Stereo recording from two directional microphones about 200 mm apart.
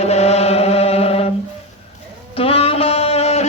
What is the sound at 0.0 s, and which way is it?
Chant, 30° left (ahead or behind).